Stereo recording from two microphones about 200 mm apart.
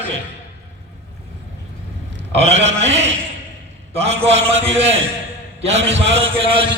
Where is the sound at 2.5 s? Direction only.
35° right (ahead or behind).